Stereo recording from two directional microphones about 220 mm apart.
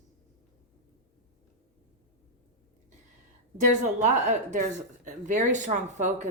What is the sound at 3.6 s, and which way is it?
Speech, 35° right (ahead or behind).